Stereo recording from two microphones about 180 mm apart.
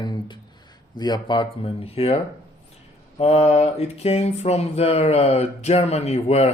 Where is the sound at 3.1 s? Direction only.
35° left (ahead or behind).